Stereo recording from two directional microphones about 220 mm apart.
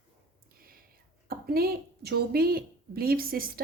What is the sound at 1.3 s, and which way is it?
A woman's voice, 45° right (ahead or behind).